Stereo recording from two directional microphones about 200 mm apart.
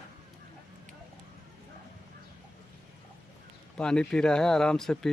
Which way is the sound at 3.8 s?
5° left (ahead or behind).